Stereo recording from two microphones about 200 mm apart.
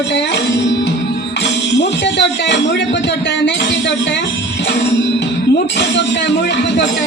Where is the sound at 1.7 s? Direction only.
60° left (ahead or behind).